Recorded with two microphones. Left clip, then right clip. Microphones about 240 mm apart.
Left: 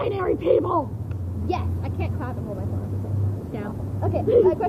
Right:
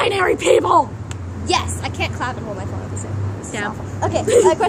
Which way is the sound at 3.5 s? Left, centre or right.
Centre.